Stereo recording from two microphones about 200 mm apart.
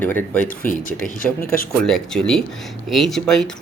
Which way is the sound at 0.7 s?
40° left (ahead or behind).